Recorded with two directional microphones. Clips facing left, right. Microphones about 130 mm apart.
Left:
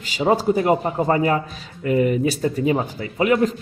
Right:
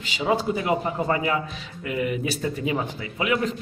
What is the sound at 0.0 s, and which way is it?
Speech, 40° left (ahead or behind).